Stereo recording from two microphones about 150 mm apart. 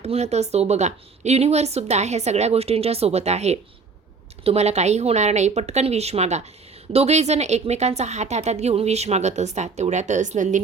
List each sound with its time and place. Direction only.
0.0 s a woman's voice: 45° right (ahead or behind)